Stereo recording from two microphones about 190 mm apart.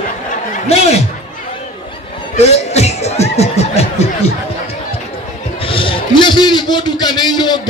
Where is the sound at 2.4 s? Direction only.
35° left (ahead or behind).